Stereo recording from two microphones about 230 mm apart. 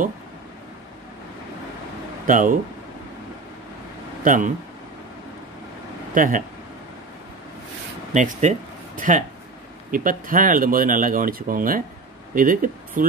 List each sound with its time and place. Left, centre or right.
2.2 s speech: right
4.2 s speech: right
6.1 s speech: right
8.1 s speech: right